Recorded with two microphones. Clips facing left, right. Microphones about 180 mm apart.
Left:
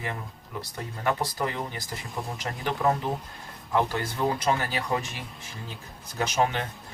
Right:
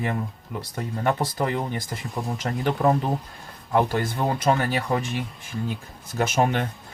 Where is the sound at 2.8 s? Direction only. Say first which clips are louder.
Right 4 dB; 35° right (ahead or behind).